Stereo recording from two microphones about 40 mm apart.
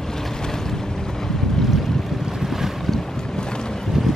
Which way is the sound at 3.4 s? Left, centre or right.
Centre.